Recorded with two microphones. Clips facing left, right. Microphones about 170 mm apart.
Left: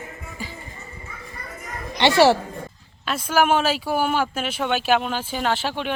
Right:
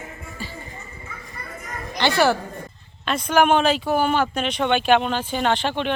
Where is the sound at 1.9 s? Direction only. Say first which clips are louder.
Left 3 dB; 20° left (ahead or behind).